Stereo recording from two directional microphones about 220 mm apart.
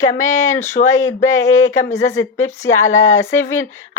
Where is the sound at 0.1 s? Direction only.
35° left (ahead or behind).